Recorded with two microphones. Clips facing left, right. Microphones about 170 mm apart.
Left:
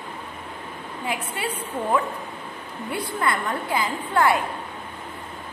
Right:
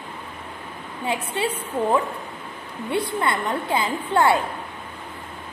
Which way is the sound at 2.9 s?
25° right (ahead or behind).